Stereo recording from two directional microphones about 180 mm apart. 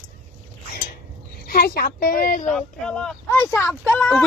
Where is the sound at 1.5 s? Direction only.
55° left (ahead or behind).